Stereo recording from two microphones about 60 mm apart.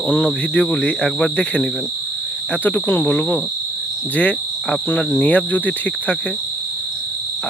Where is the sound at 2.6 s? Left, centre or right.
Left.